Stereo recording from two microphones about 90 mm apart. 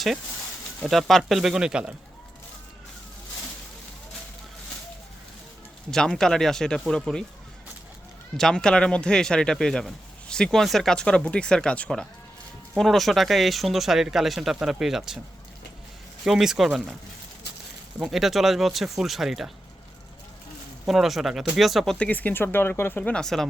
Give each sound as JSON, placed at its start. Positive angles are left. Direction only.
{"t": 0.8, "sound": "speech", "side_deg": 0}
{"t": 5.9, "sound": "speech", "side_deg": 5}
{"t": 8.4, "sound": "speech", "side_deg": 5}
{"t": 16.2, "sound": "speech", "side_deg": -5}
{"t": 18.0, "sound": "speech", "side_deg": 0}
{"t": 20.8, "sound": "speech", "side_deg": -5}
{"t": 21.9, "sound": "speech", "side_deg": 15}